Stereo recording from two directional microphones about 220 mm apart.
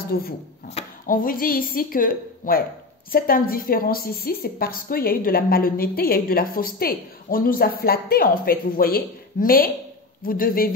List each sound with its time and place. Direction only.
0.1 s a woman's voice: 45° left (ahead or behind)